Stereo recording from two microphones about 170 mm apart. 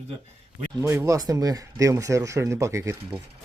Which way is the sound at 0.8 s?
15° right (ahead or behind).